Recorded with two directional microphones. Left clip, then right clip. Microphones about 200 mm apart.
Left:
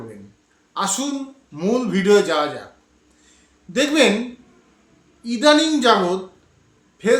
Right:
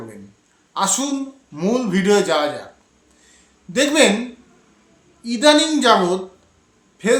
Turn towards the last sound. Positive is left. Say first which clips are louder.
# even
turn(degrees=-15)  # may be behind; listen again after turning